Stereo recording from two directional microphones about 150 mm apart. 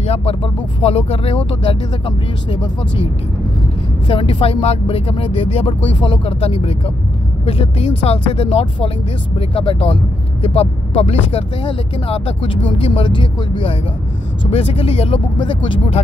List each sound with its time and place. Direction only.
0.0 s music: 45° left (ahead or behind)
0.8 s speech: 40° left (ahead or behind)
4.1 s speech: 35° left (ahead or behind)